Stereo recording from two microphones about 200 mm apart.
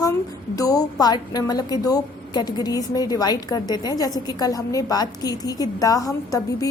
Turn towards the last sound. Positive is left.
turn(degrees=15)  # may be behind; listen again after turning